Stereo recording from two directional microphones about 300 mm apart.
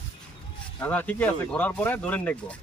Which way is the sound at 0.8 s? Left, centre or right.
Centre.